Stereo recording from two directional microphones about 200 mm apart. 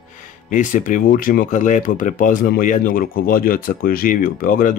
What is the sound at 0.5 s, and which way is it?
Speech, 40° left (ahead or behind).